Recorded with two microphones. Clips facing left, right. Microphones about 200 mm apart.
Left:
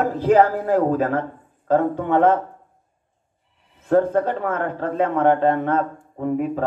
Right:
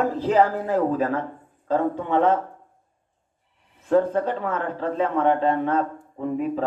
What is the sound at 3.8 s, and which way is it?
Speech, 50° left (ahead or behind).